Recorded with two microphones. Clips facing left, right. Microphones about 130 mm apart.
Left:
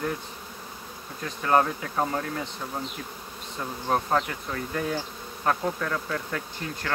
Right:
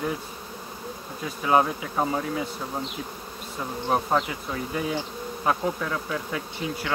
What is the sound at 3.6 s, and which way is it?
Speech, 10° right (ahead or behind).